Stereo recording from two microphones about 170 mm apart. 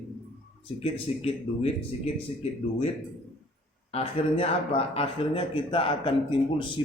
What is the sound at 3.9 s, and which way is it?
A man's voice, 35° left (ahead or behind).